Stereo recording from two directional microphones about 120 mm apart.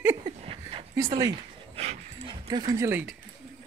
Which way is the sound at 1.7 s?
65° right (ahead or behind).